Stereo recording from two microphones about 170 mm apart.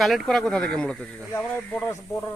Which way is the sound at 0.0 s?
Centre (ahead or behind).